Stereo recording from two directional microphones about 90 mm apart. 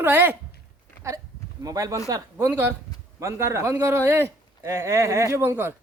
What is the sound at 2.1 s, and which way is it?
Speech, 30° right (ahead or behind).